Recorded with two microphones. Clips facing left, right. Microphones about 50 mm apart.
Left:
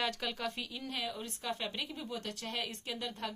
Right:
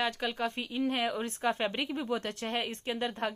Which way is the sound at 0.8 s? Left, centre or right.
Right.